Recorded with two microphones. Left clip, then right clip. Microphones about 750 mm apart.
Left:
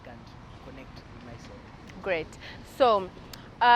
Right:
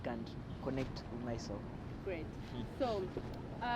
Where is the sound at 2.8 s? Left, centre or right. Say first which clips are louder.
Left 16 dB; left.